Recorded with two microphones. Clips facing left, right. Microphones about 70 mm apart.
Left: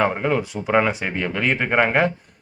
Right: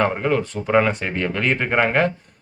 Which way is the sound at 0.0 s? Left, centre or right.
Centre.